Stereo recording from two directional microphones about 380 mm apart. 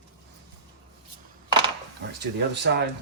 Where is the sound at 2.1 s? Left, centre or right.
Right.